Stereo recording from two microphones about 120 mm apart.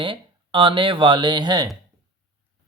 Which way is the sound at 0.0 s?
45° right (ahead or behind).